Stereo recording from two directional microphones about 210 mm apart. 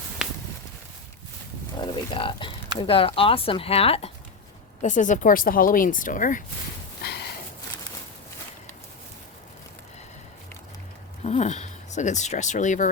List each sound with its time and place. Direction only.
0.2 s a sound: 5° right (ahead or behind)
1.8 s speech: 25° left (ahead or behind); by 6.4 s 40° left (ahead or behind)
7.0 s snort: 50° left (ahead or behind)
11.2 s speech: 35° left (ahead or behind)